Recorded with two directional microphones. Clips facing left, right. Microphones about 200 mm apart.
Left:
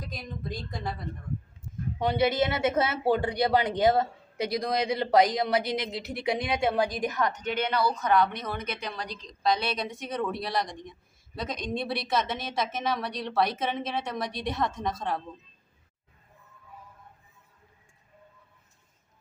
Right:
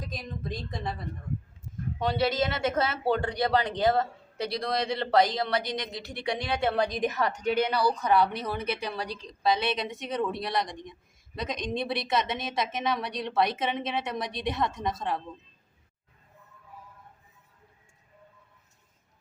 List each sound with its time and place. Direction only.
0.1 s a woman's voice: centre (ahead or behind)
2.0 s a woman's voice: 20° left (ahead or behind); by 7.7 s 10° right (ahead or behind)
7.9 s speech: 35° right (ahead or behind)
8.8 s a woman's voice: 10° right (ahead or behind)